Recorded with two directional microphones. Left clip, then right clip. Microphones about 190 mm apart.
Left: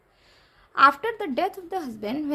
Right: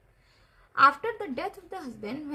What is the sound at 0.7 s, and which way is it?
A woman's voice, 45° left (ahead or behind).